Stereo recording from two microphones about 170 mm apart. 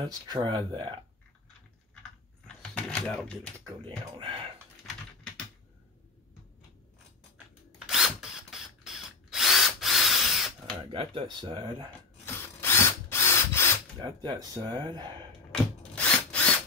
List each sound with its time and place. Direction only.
0.3 s speech: 30° right (ahead or behind)
2.4 s a sound: 5° left (ahead or behind)
7.8 s drill: 5° right (ahead or behind)
10.8 s speech: 30° right (ahead or behind)
12.5 s drill: 15° left (ahead or behind)
14.0 s speech: 25° right (ahead or behind)
15.5 s drill: 5° left (ahead or behind)